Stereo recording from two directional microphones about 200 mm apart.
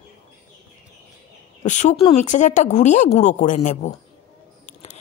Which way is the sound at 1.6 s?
35° left (ahead or behind).